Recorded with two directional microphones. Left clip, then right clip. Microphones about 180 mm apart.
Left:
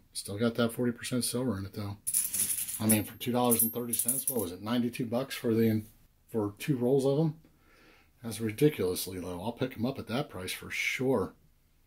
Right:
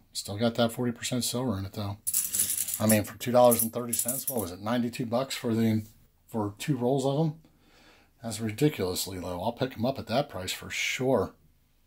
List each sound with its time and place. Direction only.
0.1 s speech: 25° right (ahead or behind)